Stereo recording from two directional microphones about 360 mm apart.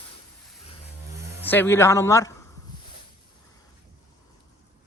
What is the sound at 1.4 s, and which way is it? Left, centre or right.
Speech, centre.